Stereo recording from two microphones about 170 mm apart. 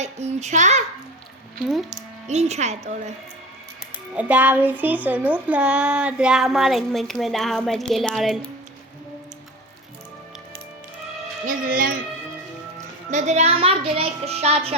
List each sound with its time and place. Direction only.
0.0 s a child's voice: 40° right (ahead or behind)
1.6 s speech: centre (ahead or behind)
2.2 s a child's voice: 40° right (ahead or behind)
4.1 s speech: 10° right (ahead or behind)
11.4 s speech: 55° right (ahead or behind)
13.1 s a child's voice: 45° right (ahead or behind)